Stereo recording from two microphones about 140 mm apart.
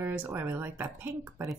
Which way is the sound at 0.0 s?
15° right (ahead or behind).